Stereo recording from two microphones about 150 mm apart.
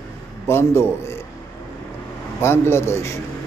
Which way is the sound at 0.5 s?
15° left (ahead or behind).